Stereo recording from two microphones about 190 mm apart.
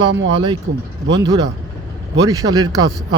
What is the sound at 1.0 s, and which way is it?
Speech, 70° right (ahead or behind).